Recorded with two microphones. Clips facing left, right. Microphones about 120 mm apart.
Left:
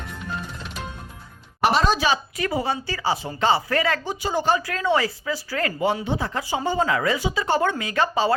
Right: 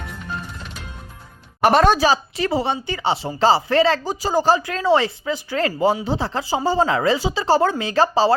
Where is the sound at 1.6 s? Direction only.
50° right (ahead or behind).